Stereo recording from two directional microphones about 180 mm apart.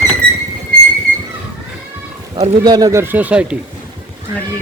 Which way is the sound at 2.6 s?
20° right (ahead or behind).